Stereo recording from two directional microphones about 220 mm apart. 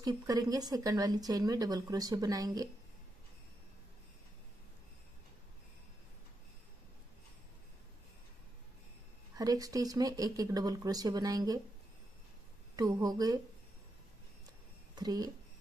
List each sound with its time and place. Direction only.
0.0 s speech: 15° right (ahead or behind)
9.3 s speech: 15° right (ahead or behind)
12.7 s speech: 20° right (ahead or behind)
15.0 s speech: 15° right (ahead or behind)